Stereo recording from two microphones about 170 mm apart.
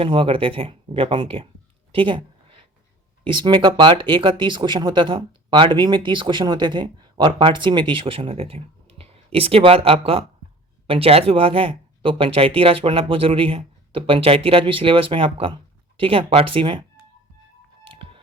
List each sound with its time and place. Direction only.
0.0 s speech: 30° right (ahead or behind)
1.9 s a sound: 30° right (ahead or behind)
3.2 s speech: 30° right (ahead or behind)
17.8 s music: 30° right (ahead or behind)